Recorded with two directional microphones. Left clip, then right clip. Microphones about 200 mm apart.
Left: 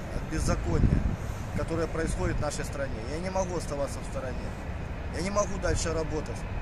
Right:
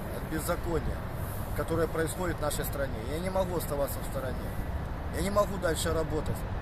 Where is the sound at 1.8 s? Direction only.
5° right (ahead or behind).